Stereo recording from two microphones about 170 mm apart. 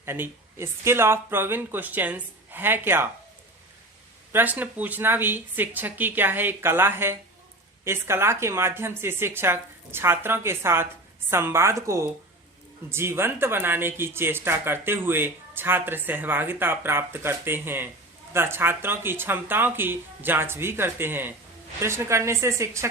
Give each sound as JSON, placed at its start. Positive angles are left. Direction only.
{"t": 0.0, "sound": "speech", "side_deg": -15}
{"t": 4.3, "sound": "speech", "side_deg": -10}